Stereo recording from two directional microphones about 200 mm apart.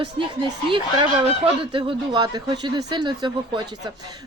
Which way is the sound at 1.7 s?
20° right (ahead or behind).